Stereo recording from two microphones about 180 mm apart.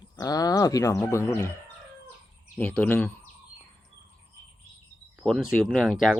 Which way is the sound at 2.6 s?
10° left (ahead or behind).